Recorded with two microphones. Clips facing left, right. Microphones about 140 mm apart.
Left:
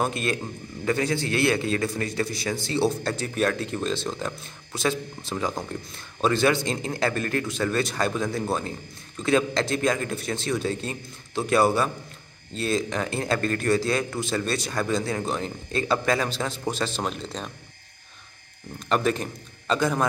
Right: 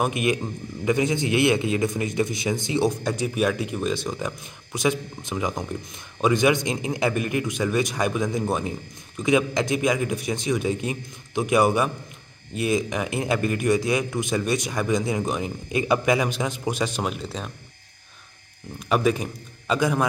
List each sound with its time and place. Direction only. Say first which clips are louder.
0.0 s a man's voice: right 3 dB; 15° right (ahead or behind)
18.8 s a man's voice: right 2 dB; 10° right (ahead or behind)